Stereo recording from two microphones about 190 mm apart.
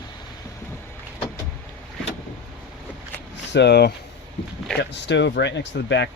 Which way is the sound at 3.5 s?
60° left (ahead or behind).